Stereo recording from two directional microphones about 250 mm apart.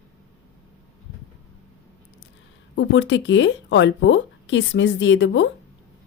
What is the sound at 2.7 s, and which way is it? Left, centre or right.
Speech, left.